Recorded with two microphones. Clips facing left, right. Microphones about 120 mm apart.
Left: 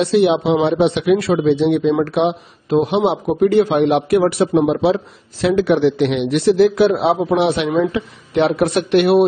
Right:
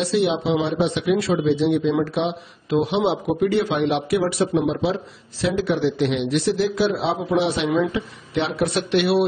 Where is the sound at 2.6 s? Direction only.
45° left (ahead or behind).